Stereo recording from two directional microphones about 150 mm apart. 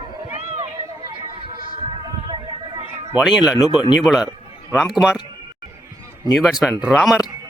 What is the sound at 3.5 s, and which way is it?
Speech, 30° left (ahead or behind).